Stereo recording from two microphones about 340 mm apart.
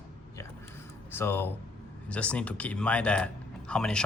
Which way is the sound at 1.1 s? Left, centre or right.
Centre.